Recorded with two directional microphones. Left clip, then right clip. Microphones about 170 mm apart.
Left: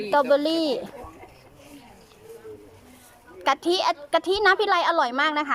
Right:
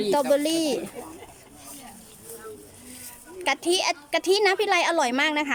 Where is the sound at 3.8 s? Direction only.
10° right (ahead or behind).